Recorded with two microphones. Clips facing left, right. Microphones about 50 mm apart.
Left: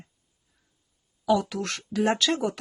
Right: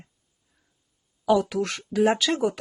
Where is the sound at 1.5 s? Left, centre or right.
Centre.